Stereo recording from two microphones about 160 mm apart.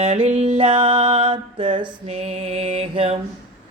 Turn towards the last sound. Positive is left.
turn(degrees=-35)  # may be behind; listen again after turning